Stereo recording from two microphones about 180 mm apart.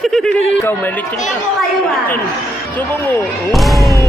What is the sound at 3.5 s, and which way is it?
Speech, centre (ahead or behind).